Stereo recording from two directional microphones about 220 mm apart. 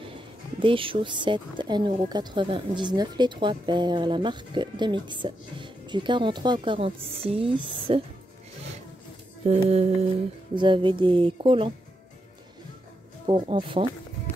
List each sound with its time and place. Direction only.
0.6 s speech: 25° right (ahead or behind)
9.5 s speech: 30° right (ahead or behind)
13.3 s speech: 20° right (ahead or behind)